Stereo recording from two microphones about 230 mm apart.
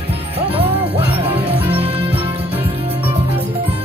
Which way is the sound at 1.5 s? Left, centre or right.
Centre.